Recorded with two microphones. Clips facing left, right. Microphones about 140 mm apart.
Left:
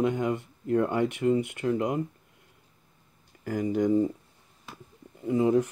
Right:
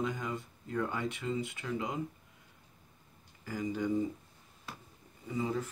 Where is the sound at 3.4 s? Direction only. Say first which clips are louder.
Left 8 dB; 65° left (ahead or behind).